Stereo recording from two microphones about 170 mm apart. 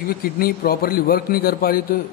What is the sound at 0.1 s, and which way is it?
A man's voice, 60° left (ahead or behind).